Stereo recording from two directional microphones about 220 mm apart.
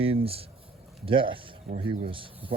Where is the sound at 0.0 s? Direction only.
25° right (ahead or behind).